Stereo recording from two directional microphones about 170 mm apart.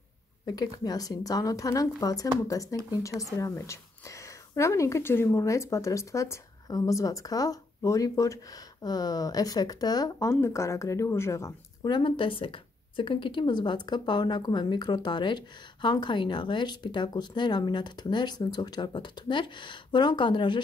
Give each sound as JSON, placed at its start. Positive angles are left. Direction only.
{"t": 0.5, "sound": "a woman's voice", "side_deg": 20}